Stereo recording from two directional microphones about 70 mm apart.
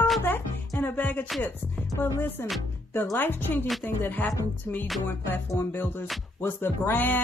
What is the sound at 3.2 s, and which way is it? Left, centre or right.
Speech, left.